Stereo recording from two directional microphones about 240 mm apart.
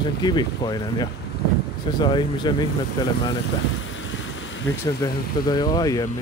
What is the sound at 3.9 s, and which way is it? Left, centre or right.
Boat, left.